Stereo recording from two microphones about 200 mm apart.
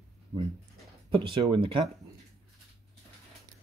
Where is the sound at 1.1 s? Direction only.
25° right (ahead or behind).